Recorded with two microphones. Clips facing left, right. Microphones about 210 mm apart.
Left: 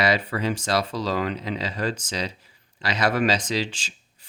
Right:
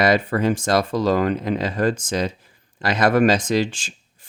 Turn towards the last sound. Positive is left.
turn(degrees=-50)  # may be behind; listen again after turning